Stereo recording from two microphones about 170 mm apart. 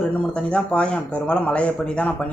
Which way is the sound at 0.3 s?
5° left (ahead or behind).